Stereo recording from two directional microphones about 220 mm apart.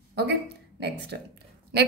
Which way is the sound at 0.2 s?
50° right (ahead or behind).